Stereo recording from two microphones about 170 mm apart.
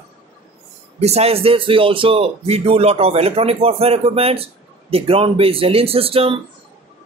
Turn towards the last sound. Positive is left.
turn(degrees=-35)  # may be behind; listen again after turning